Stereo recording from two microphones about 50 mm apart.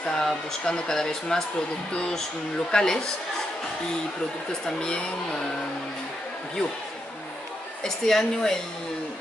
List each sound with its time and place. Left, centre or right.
0.0 s speech: centre
4.5 s speech: centre
7.8 s speech: centre